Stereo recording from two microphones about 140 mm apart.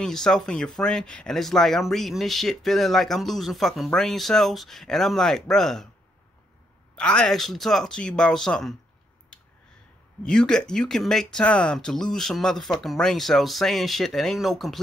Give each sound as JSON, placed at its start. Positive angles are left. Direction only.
{"t": 0.0, "sound": "speech", "side_deg": 5}
{"t": 7.0, "sound": "speech", "side_deg": 5}
{"t": 10.2, "sound": "speech", "side_deg": 5}